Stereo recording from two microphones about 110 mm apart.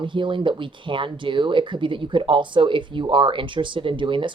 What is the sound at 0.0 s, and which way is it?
Speech, 50° right (ahead or behind).